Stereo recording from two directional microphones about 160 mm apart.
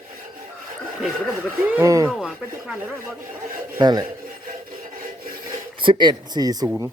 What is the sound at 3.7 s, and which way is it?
Speech, 25° right (ahead or behind).